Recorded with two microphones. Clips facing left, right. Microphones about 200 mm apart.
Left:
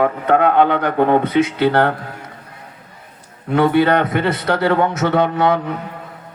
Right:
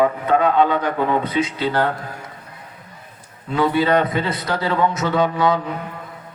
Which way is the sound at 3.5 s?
60° left (ahead or behind).